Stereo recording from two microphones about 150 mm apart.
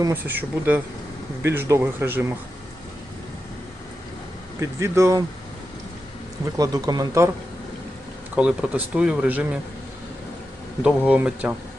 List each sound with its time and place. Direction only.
0.0 s speech: 15° right (ahead or behind)
4.6 s speech: 20° right (ahead or behind)
6.6 s speech: 25° right (ahead or behind)
8.4 s speech: 10° right (ahead or behind)
10.8 s speech: 10° right (ahead or behind)